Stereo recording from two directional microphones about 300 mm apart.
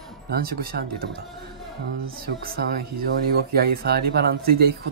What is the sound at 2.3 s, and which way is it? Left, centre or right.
Speech, right.